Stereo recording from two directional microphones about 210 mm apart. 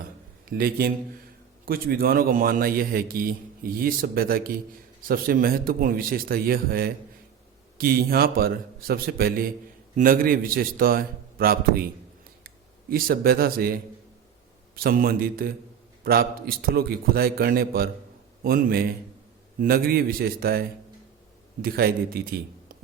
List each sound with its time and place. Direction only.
0.4 s a man's voice: 45° right (ahead or behind)
12.9 s a man's voice: 45° right (ahead or behind)
14.8 s a man's voice: 45° right (ahead or behind)